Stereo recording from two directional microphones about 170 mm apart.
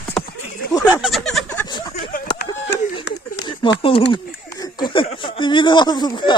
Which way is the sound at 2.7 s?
90° left.